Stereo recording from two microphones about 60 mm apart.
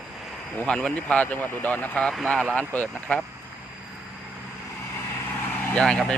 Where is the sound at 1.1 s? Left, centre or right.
Left.